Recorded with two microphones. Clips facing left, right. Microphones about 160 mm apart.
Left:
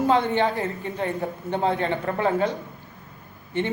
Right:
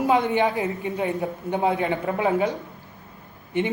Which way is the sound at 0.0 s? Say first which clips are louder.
Even; 15° right (ahead or behind).